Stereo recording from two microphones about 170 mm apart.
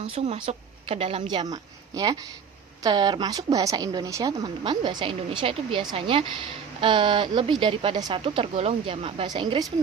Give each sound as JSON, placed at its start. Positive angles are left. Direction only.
{"t": 0.0, "sound": "speech", "side_deg": -40}